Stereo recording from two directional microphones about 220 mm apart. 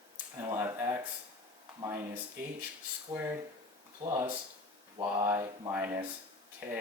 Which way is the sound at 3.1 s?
10° right (ahead or behind).